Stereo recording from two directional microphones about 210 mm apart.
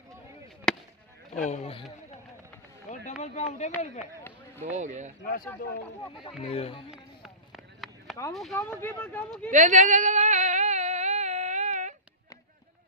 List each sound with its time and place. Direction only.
0.7 s chop: 5° left (ahead or behind)
1.3 s speech: 35° left (ahead or behind)
2.9 s speech: 35° left (ahead or behind)
4.6 s speech: 35° right (ahead or behind)
6.4 s speech: 25° left (ahead or behind)
6.9 s a sound: centre (ahead or behind)
8.3 s speech: centre (ahead or behind)
9.5 s a sound: 35° right (ahead or behind)